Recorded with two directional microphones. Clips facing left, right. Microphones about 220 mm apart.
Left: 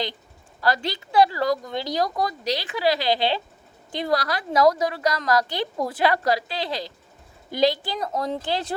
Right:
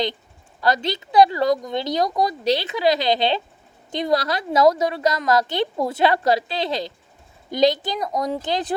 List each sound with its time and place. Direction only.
0.6 s a woman's voice: 20° right (ahead or behind)